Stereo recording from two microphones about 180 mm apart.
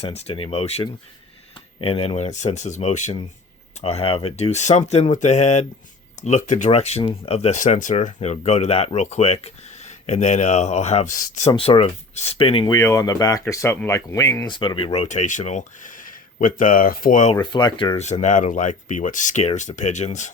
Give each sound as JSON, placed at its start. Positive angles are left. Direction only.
{"t": 0.0, "sound": "speech", "side_deg": 35}
{"t": 12.7, "sound": "speech", "side_deg": 15}
{"t": 17.3, "sound": "speech", "side_deg": 25}